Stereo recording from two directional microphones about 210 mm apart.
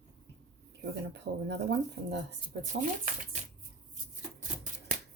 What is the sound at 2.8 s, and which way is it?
Speech, 40° right (ahead or behind).